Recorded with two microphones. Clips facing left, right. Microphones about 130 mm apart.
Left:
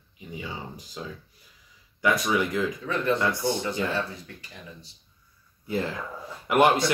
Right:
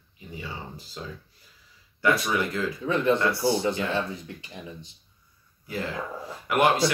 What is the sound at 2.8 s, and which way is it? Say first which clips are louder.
Speech: right 5 dB; 20° right (ahead or behind).